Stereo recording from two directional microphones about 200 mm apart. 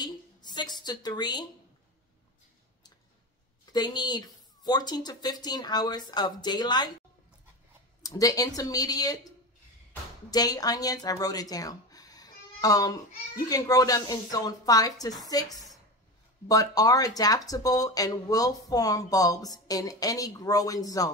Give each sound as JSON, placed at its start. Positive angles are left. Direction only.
{"t": 0.0, "sound": "a sound", "side_deg": 20}
{"t": 3.7, "sound": "speech", "side_deg": 20}
{"t": 8.0, "sound": "speech", "side_deg": 15}
{"t": 10.3, "sound": "speech", "side_deg": 20}